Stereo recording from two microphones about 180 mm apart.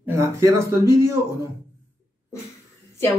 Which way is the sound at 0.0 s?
15° right (ahead or behind).